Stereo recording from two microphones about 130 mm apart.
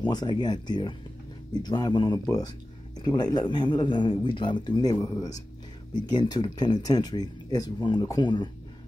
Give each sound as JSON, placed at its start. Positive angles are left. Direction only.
{"t": 0.0, "sound": "speech", "side_deg": 35}